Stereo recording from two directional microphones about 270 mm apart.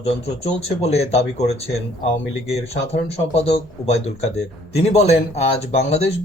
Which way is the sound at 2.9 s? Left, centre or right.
Left.